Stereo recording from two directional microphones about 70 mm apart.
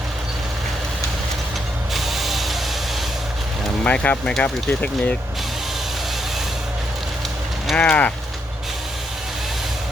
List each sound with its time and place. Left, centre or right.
1.9 s spray: centre
3.8 s speech: left
7.8 s a sound: centre